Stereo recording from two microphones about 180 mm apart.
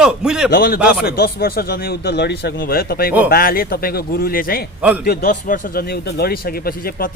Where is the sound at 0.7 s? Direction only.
5° right (ahead or behind).